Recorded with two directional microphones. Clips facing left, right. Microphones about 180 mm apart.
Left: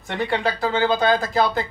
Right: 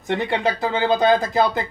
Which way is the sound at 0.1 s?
20° right (ahead or behind).